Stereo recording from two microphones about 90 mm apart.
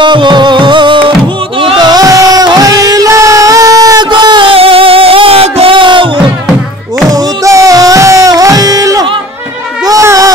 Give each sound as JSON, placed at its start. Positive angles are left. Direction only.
{"t": 0.0, "sound": "music", "side_deg": -60}
{"t": 1.8, "sound": "music", "side_deg": -45}
{"t": 4.1, "sound": "music", "side_deg": -60}
{"t": 7.1, "sound": "music", "side_deg": -35}
{"t": 9.8, "sound": "a sound", "side_deg": -40}